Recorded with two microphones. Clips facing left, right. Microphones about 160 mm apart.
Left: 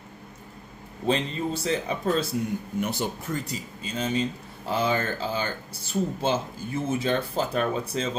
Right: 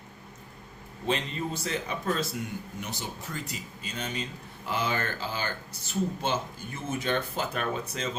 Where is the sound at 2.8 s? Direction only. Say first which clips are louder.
Left 12 dB; 60° left (ahead or behind).